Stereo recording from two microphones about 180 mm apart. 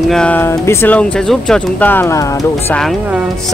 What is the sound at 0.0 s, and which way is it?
Speech, 5° left (ahead or behind).